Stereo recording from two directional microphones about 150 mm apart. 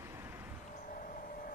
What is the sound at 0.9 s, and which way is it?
Vehicle, 70° left (ahead or behind).